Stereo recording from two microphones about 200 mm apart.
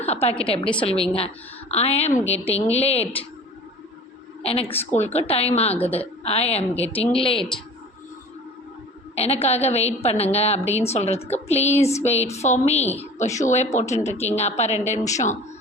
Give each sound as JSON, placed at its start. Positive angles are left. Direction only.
{"t": 0.0, "sound": "a woman's voice", "side_deg": 30}
{"t": 4.7, "sound": "speech", "side_deg": 10}
{"t": 5.3, "sound": "speech", "side_deg": 30}
{"t": 9.1, "sound": "speech", "side_deg": 30}